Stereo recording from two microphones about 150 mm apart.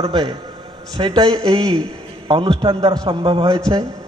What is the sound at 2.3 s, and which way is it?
A man's voice, 35° right (ahead or behind).